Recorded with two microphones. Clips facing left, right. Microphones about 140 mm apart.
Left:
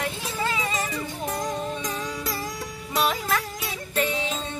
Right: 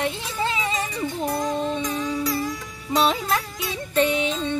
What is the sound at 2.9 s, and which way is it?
Music, 25° right (ahead or behind).